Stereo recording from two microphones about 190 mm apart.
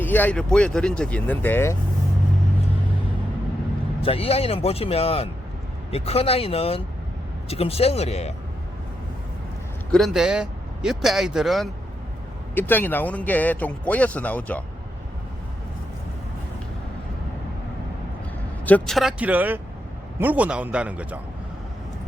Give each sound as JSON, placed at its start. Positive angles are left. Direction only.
{"t": 0.0, "sound": "speech", "side_deg": 10}
{"t": 4.0, "sound": "speech", "side_deg": 30}
{"t": 9.9, "sound": "speech", "side_deg": 0}
{"t": 18.6, "sound": "a man's voice", "side_deg": 5}